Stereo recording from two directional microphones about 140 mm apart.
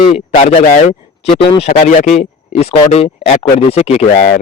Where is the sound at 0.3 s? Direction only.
65° left (ahead or behind).